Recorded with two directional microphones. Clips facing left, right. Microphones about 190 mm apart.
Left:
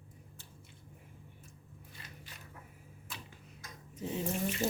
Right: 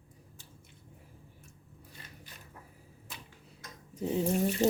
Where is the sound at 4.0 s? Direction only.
40° right (ahead or behind).